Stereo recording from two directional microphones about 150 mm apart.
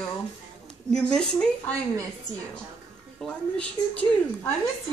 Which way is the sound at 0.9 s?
5° left (ahead or behind).